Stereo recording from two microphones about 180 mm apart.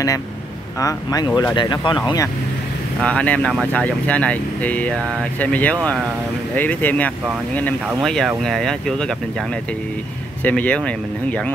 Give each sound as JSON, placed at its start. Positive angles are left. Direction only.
{"t": 0.7, "sound": "speech", "side_deg": 20}
{"t": 3.0, "sound": "speech", "side_deg": 5}
{"t": 10.4, "sound": "speech", "side_deg": 10}